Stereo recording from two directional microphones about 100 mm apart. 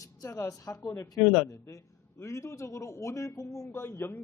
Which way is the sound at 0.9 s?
20° left (ahead or behind).